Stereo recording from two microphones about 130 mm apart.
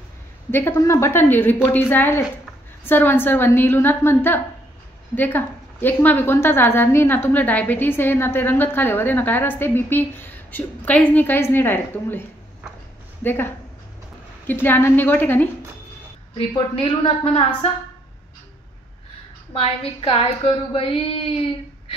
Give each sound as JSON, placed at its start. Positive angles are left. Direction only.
{"t": 0.5, "sound": "a woman's voice", "side_deg": 20}
{"t": 14.5, "sound": "a woman's voice", "side_deg": 15}
{"t": 16.3, "sound": "a woman's voice", "side_deg": 45}
{"t": 19.5, "sound": "a woman's voice", "side_deg": 45}